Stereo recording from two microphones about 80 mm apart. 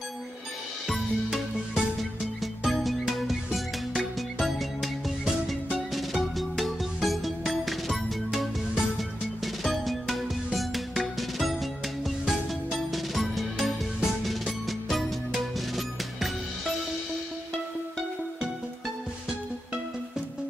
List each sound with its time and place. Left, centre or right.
0.8 s music: centre